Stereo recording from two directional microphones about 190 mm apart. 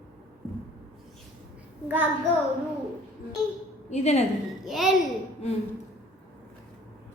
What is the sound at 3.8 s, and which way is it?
Speech, 35° left (ahead or behind).